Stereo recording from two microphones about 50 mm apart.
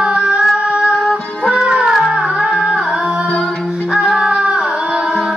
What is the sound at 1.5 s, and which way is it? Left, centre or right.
Music, centre.